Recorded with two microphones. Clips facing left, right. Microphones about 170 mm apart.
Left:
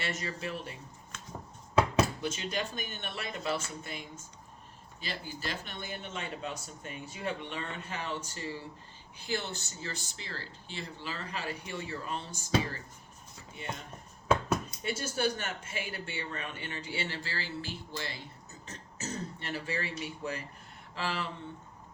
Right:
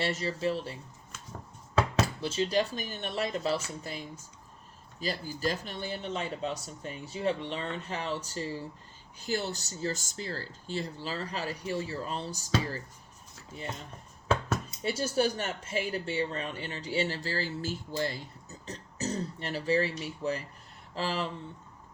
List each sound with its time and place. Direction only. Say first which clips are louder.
0.0 s speech: right 7 dB; 30° right (ahead or behind)
2.2 s speech: right 6 dB; 30° right (ahead or behind)
14.8 s speech: right 4 dB; 35° right (ahead or behind)